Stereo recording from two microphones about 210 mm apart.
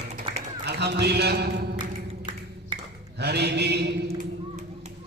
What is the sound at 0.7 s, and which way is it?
Speech, 50° right (ahead or behind).